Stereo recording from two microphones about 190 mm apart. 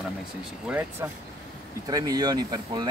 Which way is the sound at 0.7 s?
5° right (ahead or behind).